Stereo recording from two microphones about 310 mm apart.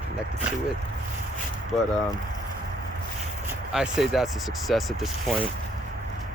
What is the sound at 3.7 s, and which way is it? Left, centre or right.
Speech, centre.